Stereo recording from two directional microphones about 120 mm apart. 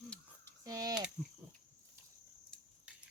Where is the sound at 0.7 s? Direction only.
30° right (ahead or behind).